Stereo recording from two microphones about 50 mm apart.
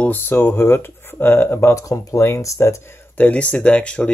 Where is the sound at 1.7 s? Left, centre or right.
Left.